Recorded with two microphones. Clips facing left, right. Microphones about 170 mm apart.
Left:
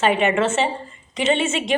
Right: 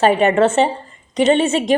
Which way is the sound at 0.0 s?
40° right (ahead or behind).